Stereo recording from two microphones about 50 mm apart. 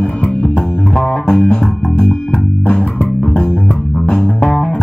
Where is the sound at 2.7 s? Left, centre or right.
Centre.